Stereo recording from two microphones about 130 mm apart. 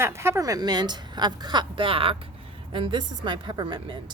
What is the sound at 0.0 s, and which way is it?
A woman's voice, 20° right (ahead or behind).